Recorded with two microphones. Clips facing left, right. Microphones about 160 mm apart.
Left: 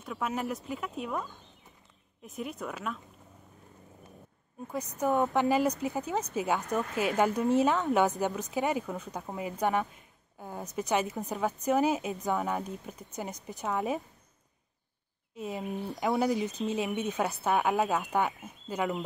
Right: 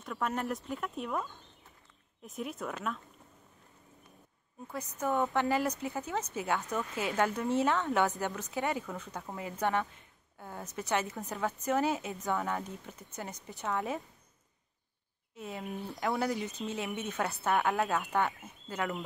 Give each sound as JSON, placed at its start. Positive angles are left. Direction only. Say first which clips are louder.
{"t": 0.0, "sound": "speech", "louder": "left 1 dB", "side_deg": 5}
{"t": 4.6, "sound": "speech", "louder": "left 4 dB", "side_deg": 15}
{"t": 15.3, "sound": "speech", "louder": "left 4 dB", "side_deg": 15}